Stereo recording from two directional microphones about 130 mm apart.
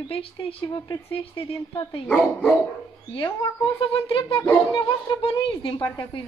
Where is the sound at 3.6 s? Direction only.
45° left (ahead or behind).